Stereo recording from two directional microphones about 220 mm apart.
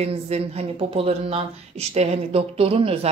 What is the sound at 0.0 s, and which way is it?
Speech, 30° right (ahead or behind).